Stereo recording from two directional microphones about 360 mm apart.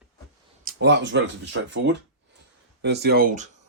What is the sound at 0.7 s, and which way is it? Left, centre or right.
Speech, right.